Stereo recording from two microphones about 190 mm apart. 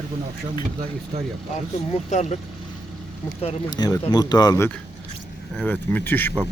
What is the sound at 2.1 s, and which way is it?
Speech, 40° left (ahead or behind).